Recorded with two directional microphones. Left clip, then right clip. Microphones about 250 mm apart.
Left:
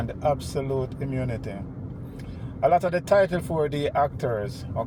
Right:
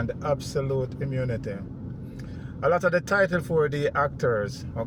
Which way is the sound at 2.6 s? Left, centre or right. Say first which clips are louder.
Left 2 dB; centre.